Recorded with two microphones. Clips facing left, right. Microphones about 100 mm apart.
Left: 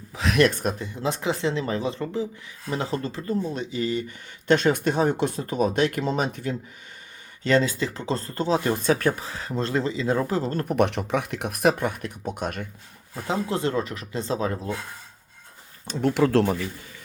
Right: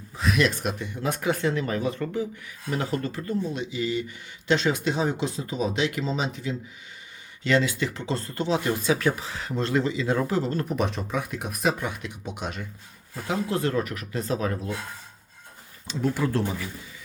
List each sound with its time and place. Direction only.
0.1 s a sound: 90° left
0.3 s speech: 50° left (ahead or behind); by 3.3 s 30° left (ahead or behind)
3.5 s speech: 40° left (ahead or behind)
7.4 s speech: 40° left (ahead or behind)
13.2 s speech: 30° left (ahead or behind)
15.9 s speech: 55° left (ahead or behind)
16.1 s speech: 90° left